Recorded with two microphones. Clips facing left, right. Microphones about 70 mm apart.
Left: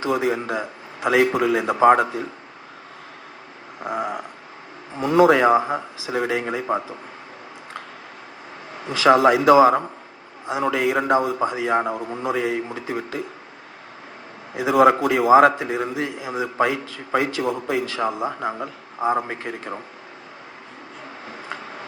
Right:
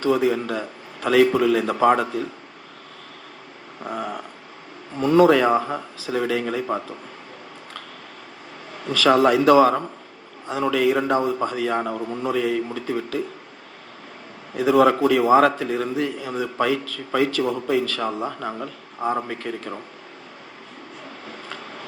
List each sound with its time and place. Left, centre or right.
0.0 s a man's voice: centre
3.8 s a man's voice: centre
8.7 s a man's voice: left
14.8 s a man's voice: centre
21.2 s vehicle: left